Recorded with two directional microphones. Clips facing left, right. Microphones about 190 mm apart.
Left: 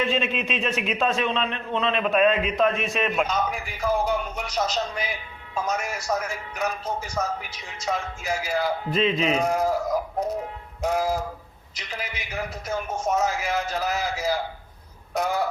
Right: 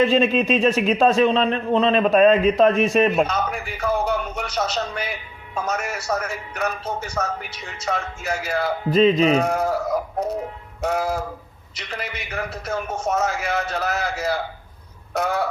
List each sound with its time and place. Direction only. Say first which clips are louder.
0.0 s speech: right 8 dB; 35° right (ahead or behind)
3.2 s a man's voice: right 2 dB; centre (ahead or behind)
8.9 s speech: right 9 dB; 40° right (ahead or behind)
9.4 s a man's voice: right 1 dB; centre (ahead or behind)
10.8 s a man's voice: right 1 dB; centre (ahead or behind)